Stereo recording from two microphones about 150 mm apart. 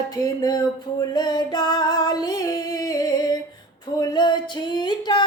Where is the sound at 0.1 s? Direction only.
25° left (ahead or behind).